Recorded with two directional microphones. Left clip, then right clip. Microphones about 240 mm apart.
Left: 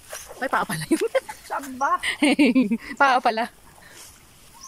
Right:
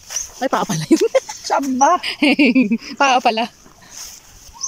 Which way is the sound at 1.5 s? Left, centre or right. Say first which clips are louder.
Right 10 dB; right.